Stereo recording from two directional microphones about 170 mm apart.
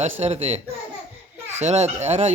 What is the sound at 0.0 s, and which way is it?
Speech, 35° right (ahead or behind).